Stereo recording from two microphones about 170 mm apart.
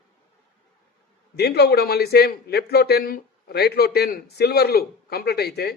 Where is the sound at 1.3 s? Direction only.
70° left (ahead or behind).